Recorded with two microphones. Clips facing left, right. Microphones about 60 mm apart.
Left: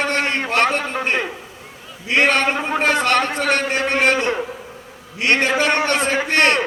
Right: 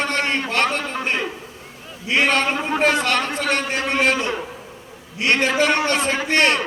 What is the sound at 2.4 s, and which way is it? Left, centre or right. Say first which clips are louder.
Speech: left 2 dB; left.